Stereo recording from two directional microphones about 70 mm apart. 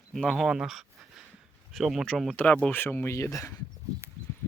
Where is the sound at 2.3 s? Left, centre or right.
Left.